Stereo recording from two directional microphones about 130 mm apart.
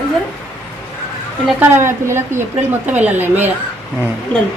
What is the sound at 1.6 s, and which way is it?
A woman's voice, 20° right (ahead or behind).